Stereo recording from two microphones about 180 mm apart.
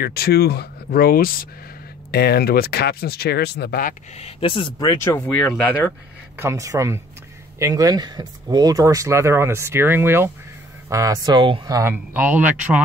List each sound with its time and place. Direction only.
0.0 s speech: 60° left (ahead or behind)
4.2 s speech: 30° left (ahead or behind)
5.2 s speech: 5° left (ahead or behind)
6.3 s speech: 15° right (ahead or behind)